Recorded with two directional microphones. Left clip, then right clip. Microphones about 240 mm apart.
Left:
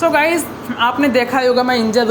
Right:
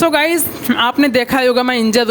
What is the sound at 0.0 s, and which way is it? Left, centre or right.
Speech, right.